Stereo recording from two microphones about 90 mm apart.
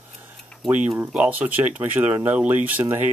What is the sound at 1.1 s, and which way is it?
Speech, 15° right (ahead or behind).